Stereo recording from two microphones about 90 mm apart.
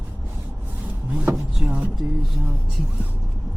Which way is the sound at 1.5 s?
5° right (ahead or behind).